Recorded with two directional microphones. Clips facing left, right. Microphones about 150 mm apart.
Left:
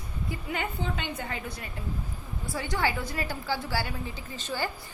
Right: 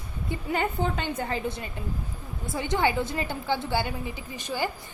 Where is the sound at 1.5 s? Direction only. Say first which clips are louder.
Right 5 dB; 25° right (ahead or behind).